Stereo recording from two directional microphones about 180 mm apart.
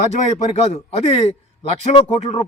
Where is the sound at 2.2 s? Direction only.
35° left (ahead or behind).